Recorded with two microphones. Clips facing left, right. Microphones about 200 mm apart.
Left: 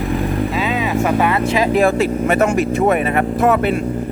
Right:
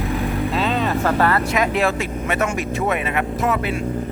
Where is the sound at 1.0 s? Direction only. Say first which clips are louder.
Left 4 dB; 15° left (ahead or behind).